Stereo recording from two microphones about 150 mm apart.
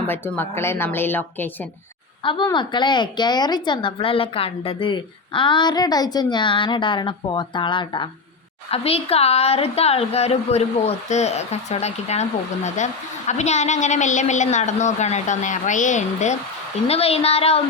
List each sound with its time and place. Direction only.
0.1 s speech: 15° left (ahead or behind)
2.2 s a woman's voice: 30° left (ahead or behind); by 16.4 s 55° left (ahead or behind)
16.8 s a woman's voice: 40° left (ahead or behind)